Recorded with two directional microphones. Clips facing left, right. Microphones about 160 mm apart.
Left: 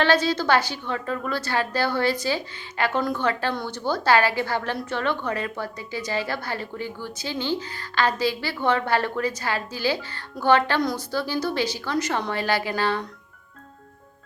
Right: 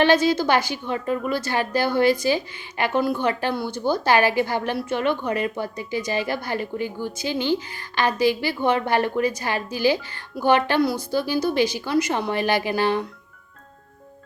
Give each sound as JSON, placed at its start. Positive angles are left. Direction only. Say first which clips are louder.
{"t": 0.0, "sound": "a woman's voice", "louder": "right 3 dB", "side_deg": -15}